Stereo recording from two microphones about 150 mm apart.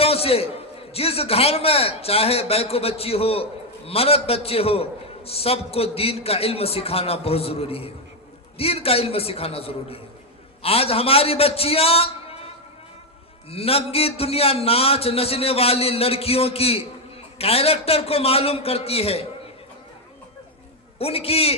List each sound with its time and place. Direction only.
0.0 s a sound: 40° left (ahead or behind)
0.9 s a man's voice: 40° left (ahead or behind)
13.5 s a man's voice: 40° left (ahead or behind)
21.0 s a man's voice: 40° left (ahead or behind)